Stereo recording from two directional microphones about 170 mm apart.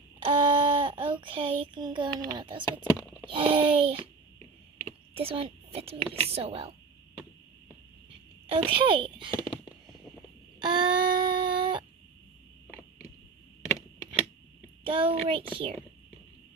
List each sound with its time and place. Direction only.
0.2 s a woman's voice: 30° right (ahead or behind)
5.1 s a woman's voice: 35° right (ahead or behind)
8.4 s a woman's voice: 30° right (ahead or behind)
10.6 s a sound: 25° right (ahead or behind)
14.8 s a woman's voice: 30° right (ahead or behind)